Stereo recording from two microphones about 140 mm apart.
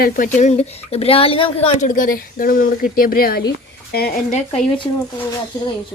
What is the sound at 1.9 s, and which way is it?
Speech, 85° left.